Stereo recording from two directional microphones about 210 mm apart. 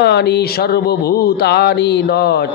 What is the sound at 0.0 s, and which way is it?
Speech, 50° left (ahead or behind).